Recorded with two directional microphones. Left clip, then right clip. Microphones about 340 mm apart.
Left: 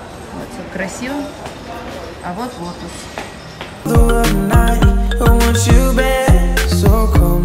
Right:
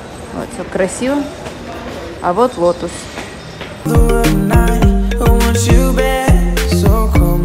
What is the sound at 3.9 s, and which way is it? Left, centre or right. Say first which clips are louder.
Music: right 1 dB; centre.